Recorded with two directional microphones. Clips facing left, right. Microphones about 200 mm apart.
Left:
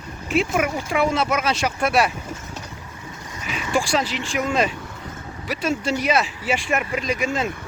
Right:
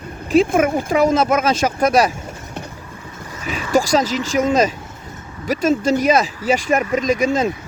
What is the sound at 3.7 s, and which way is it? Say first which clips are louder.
Speech: right 6 dB; 40° right (ahead or behind).